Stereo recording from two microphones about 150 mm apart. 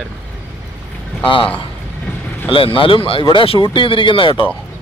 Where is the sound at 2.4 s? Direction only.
35° left (ahead or behind).